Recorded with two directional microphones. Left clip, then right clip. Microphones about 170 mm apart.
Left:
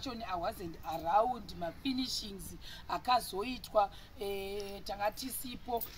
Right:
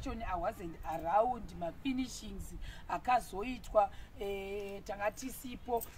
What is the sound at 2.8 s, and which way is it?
Speech, centre (ahead or behind).